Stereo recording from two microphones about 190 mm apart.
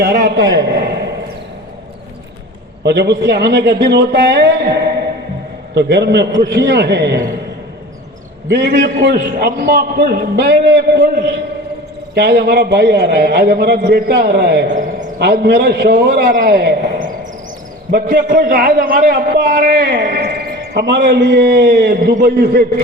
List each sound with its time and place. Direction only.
0.0 s a man's voice: 55° right (ahead or behind)
2.8 s a man's voice: 65° right (ahead or behind)
5.7 s a man's voice: 65° right (ahead or behind)
8.4 s a man's voice: 60° right (ahead or behind)
19.8 s a man's voice: 65° right (ahead or behind)